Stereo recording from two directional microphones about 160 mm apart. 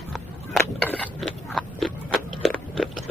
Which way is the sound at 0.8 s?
5° left (ahead or behind).